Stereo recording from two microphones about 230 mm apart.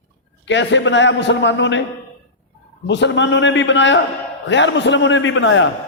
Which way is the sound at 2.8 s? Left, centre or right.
Left.